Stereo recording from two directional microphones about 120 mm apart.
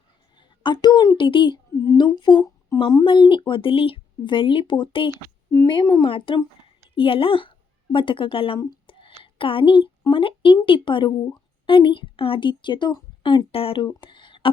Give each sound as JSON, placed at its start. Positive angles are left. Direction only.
{"t": 0.3, "sound": "a woman's voice", "side_deg": 40}
{"t": 8.5, "sound": "speech", "side_deg": 30}
{"t": 8.9, "sound": "a sound", "side_deg": 45}
{"t": 10.1, "sound": "a woman's voice", "side_deg": 45}
{"t": 13.8, "sound": "speech", "side_deg": 40}